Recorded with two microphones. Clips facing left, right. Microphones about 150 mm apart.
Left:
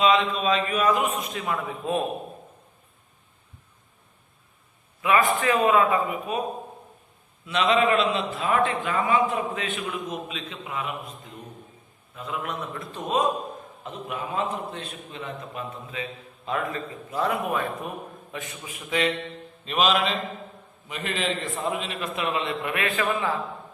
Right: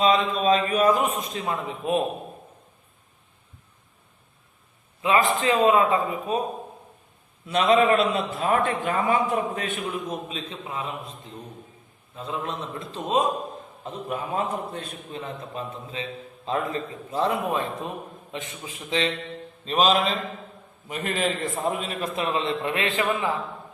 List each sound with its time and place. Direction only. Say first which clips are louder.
0.0 s a man's voice: right 1 dB; 35° right (ahead or behind); by 2.0 s 20° right (ahead or behind)
5.0 s a man's voice: even; 25° right (ahead or behind)
7.4 s a man's voice: right 2 dB; 40° right (ahead or behind)
9.8 s a man's voice: right 1 dB; 35° right (ahead or behind)
12.1 s a man's voice: right 1 dB; 30° right (ahead or behind)
13.8 s a man's voice: right 2 dB; 40° right (ahead or behind); by 23.3 s 25° right (ahead or behind)